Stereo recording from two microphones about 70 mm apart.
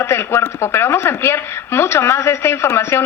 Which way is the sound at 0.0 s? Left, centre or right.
Left.